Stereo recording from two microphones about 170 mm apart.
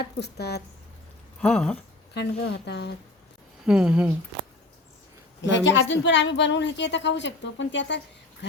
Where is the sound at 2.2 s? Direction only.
90° left.